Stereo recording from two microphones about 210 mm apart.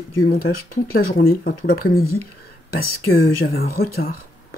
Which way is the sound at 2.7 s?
45° left (ahead or behind).